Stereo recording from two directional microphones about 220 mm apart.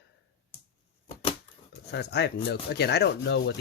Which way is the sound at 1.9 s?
50° left (ahead or behind).